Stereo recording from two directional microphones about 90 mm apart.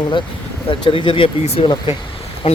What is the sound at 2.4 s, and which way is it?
Speech, 90° left.